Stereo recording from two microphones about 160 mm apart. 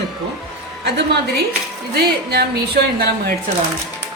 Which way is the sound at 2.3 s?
90° right.